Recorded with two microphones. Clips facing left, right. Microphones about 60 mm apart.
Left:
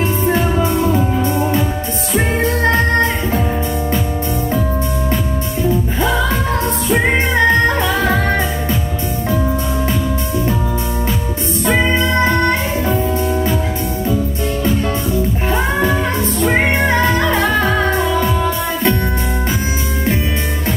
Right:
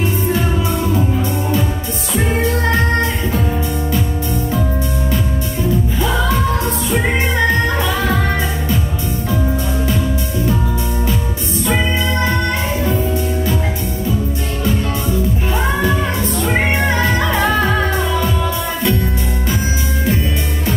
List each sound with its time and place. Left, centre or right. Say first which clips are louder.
6.9 s music: left 4 dB; left
15.5 s music: left 2 dB; left